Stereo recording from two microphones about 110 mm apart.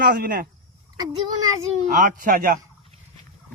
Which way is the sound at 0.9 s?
40° right (ahead or behind).